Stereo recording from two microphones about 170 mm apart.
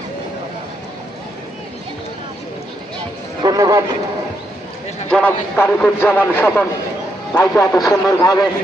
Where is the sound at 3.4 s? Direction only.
20° right (ahead or behind).